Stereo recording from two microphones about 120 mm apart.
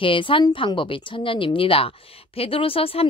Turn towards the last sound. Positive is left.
turn(degrees=50)  # may be behind; listen again after turning